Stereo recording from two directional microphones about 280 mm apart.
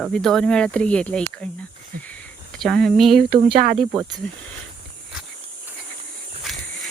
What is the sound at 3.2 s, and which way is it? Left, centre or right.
Speech, right.